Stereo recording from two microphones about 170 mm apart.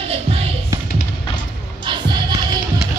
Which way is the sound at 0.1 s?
35° right (ahead or behind).